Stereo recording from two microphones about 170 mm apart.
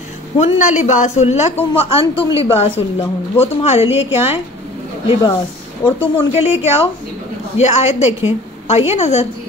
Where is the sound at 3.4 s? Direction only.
35° left (ahead or behind).